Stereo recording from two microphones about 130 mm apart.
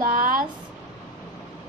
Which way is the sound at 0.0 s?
90° right.